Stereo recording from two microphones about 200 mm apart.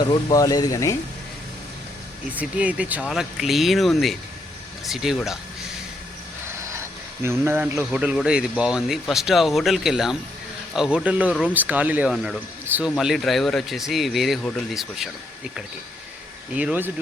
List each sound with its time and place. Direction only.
0.0 s speech: 20° left (ahead or behind)
2.3 s speech: 5° right (ahead or behind)
6.7 s speech: 15° right (ahead or behind)
12.6 s a sound: 10° right (ahead or behind)
12.9 s speech: centre (ahead or behind)
16.6 s speech: 10° right (ahead or behind)